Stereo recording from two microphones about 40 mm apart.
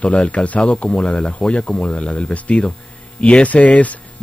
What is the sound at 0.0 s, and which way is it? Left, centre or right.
Speech, left.